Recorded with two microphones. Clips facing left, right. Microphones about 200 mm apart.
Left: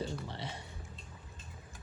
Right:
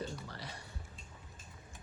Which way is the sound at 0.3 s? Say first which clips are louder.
Left 5 dB; 25° left (ahead or behind).